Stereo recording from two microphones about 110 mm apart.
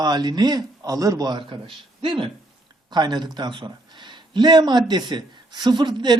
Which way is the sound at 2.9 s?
40° right (ahead or behind).